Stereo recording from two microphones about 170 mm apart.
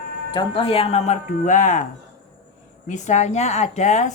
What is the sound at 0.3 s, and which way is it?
Speech, 30° left (ahead or behind).